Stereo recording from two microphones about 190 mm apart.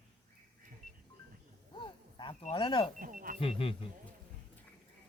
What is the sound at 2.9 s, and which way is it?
Speech, 45° right (ahead or behind).